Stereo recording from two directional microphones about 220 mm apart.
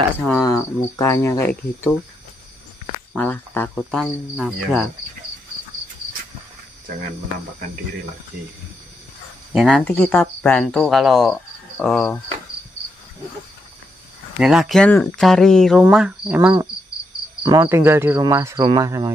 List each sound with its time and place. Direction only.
0.4 s cricket: 15° left (ahead or behind)
3.1 s cricket: 5° left (ahead or behind)
9.5 s cricket: 5° right (ahead or behind)
14.4 s cricket: centre (ahead or behind)
17.4 s speech: 15° right (ahead or behind)